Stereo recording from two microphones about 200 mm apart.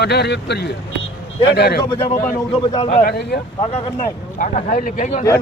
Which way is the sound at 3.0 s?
50° left (ahead or behind).